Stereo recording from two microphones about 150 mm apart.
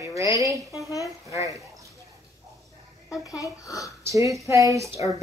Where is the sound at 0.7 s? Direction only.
20° left (ahead or behind).